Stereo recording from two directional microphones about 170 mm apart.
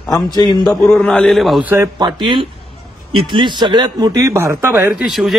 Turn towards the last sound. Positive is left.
turn(degrees=0)  # may be behind; listen again after turning